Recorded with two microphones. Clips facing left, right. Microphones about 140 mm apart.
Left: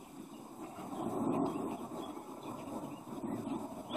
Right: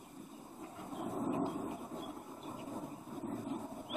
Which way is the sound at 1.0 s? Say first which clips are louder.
Left 3 dB; 15° left (ahead or behind).